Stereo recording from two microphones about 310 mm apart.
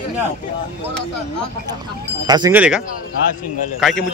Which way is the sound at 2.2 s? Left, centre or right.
Centre.